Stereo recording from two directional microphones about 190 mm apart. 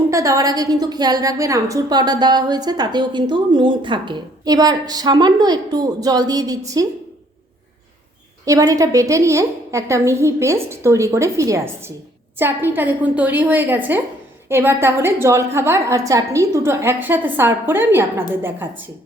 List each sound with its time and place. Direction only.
0.1 s a woman's voice: 15° right (ahead or behind)
8.4 s a woman's voice: 20° right (ahead or behind)